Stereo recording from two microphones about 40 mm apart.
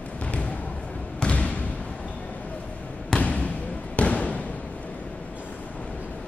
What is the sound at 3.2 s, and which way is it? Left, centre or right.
Basketball bounce, left.